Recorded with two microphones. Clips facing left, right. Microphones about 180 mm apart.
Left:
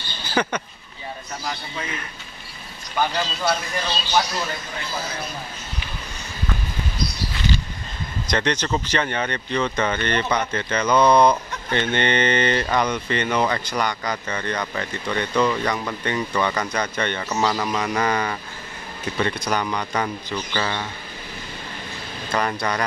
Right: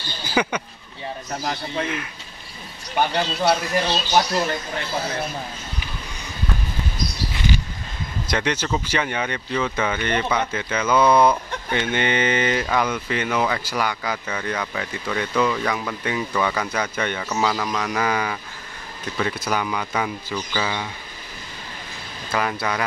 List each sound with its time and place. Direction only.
0.3 s vehicle: 10° right (ahead or behind)
1.4 s speech: 45° right (ahead or behind)
3.2 s speech: 65° right (ahead or behind)
8.3 s speech: 10° right (ahead or behind)
22.3 s speech: 5° right (ahead or behind)